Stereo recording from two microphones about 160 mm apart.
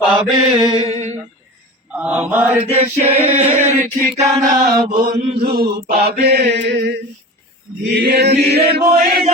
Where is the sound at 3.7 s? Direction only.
45° right (ahead or behind).